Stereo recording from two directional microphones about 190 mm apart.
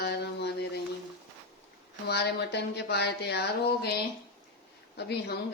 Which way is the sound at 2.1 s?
60° left (ahead or behind).